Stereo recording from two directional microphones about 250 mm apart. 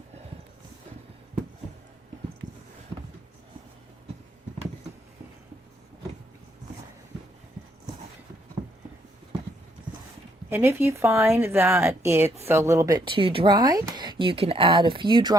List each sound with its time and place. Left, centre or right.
10.5 s speech: centre